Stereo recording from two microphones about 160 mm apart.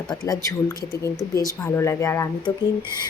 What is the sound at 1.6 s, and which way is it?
Speech, 15° left (ahead or behind).